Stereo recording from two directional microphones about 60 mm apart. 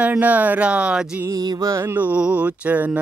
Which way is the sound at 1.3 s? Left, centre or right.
Right.